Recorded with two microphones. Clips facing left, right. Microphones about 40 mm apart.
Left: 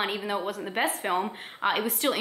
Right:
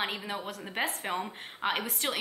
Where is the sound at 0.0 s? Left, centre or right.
Centre.